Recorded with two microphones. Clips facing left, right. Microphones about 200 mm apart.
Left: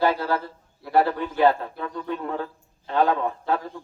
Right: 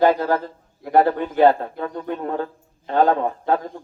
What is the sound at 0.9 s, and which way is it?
A man's voice, 45° right (ahead or behind).